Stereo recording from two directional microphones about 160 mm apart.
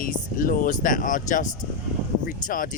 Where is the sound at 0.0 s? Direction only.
60° left (ahead or behind).